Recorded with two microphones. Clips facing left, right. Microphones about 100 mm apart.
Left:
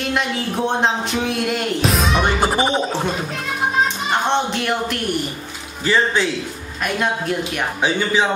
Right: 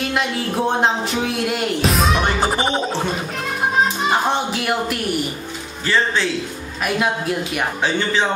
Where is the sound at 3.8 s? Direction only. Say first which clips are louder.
Right 2 dB; 5° right (ahead or behind).